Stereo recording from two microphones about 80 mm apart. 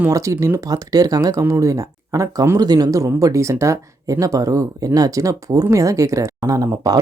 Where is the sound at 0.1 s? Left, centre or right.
Right.